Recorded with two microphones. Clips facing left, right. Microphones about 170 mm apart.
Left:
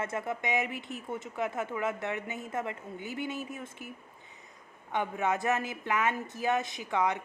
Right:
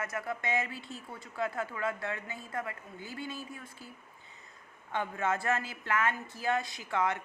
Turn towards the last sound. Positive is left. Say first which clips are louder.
# left 2 dB
turn(degrees=20)  # may be behind; listen again after turning